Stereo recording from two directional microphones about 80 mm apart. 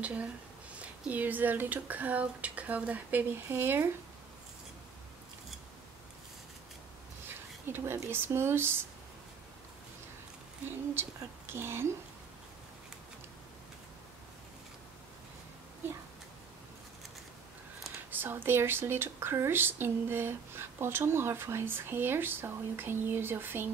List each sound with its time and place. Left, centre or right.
0.0 s speech: centre
7.6 s speech: right
11.0 s speech: right
18.1 s speech: right